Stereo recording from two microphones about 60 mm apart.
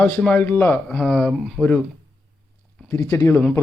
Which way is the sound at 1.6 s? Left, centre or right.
Centre.